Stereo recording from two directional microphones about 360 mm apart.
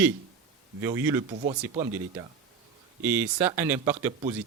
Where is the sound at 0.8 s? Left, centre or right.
Centre.